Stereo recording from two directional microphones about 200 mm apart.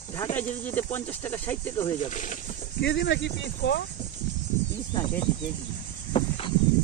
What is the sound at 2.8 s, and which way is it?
Speech, 60° left (ahead or behind).